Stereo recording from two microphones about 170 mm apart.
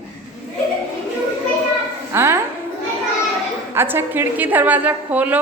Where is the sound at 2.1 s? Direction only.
15° right (ahead or behind).